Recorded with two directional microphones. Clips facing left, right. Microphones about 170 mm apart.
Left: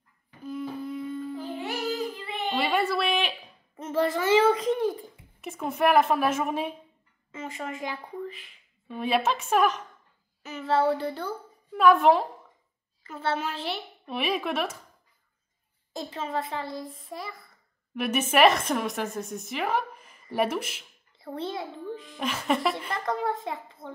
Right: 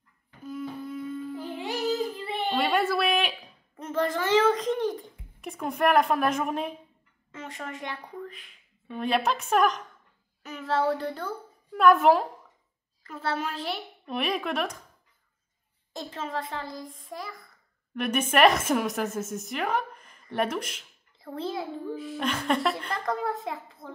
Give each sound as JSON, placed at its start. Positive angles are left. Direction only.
{"t": 0.4, "sound": "humming", "side_deg": 0}
{"t": 2.0, "sound": "child singing", "side_deg": -30}
{"t": 2.5, "sound": "a woman's voice", "side_deg": 0}
{"t": 15.9, "sound": "a woman's voice", "side_deg": 0}
{"t": 22.2, "sound": "a woman's voice", "side_deg": 5}